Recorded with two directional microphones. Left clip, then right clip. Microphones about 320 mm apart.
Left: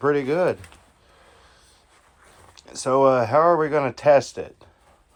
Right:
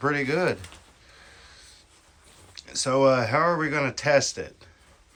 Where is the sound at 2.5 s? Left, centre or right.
Centre.